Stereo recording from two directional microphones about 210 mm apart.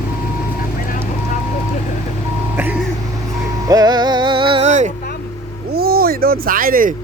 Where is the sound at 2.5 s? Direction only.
10° right (ahead or behind).